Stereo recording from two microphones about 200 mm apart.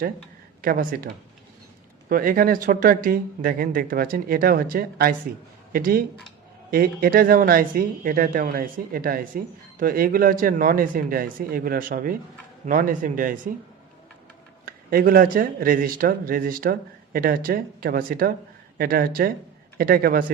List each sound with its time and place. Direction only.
0.6 s a man's voice: 45° right (ahead or behind)
14.6 s speech: 45° right (ahead or behind)